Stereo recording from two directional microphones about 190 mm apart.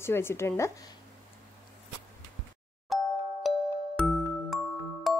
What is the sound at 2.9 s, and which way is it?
Ding-dong, centre (ahead or behind).